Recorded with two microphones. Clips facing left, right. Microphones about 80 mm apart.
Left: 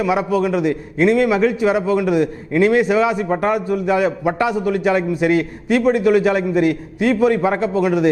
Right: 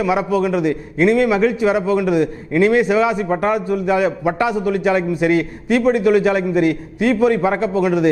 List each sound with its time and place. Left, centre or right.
0.0 s a man's voice: right